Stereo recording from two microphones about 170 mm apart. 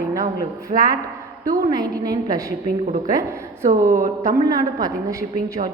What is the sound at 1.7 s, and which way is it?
Speech, 25° right (ahead or behind).